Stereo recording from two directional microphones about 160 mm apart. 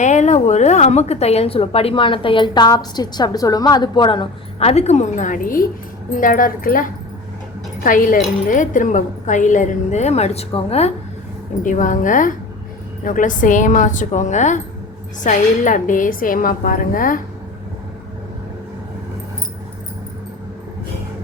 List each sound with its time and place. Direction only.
0.0 s a woman's voice: 50° left (ahead or behind)
11.6 s a woman's voice: 55° left (ahead or behind)